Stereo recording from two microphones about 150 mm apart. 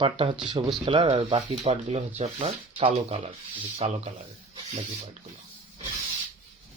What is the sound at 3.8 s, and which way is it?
Speech, 45° right (ahead or behind).